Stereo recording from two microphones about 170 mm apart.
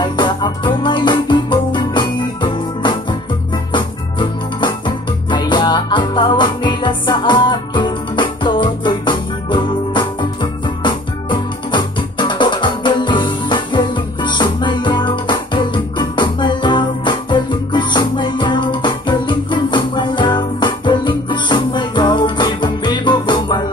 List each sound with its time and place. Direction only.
0.0 s music: 25° left (ahead or behind)
3.7 s organ: 30° left (ahead or behind)